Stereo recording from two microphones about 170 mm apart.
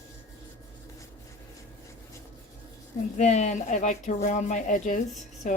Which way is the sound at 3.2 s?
45° left (ahead or behind).